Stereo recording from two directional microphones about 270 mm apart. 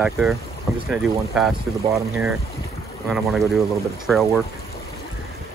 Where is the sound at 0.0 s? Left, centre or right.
Centre.